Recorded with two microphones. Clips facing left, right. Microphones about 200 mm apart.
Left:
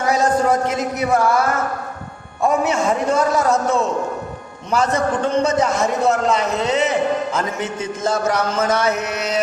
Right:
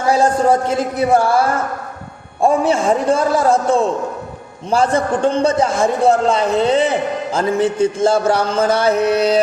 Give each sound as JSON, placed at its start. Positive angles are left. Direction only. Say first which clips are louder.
{"t": 0.0, "sound": "a man's voice", "louder": "right 3 dB", "side_deg": -30}